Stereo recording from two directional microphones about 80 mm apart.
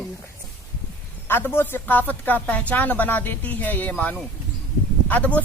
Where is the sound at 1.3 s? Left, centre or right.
Left.